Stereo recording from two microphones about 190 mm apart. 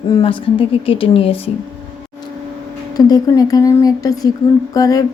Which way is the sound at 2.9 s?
20° left (ahead or behind).